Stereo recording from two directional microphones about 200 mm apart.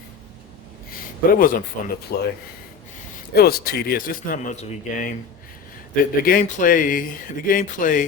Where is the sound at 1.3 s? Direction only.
45° left (ahead or behind).